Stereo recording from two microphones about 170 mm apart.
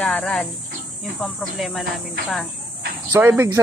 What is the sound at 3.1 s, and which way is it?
Speech, 15° right (ahead or behind).